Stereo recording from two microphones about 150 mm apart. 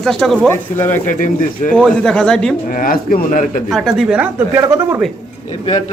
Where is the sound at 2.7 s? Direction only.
70° left (ahead or behind).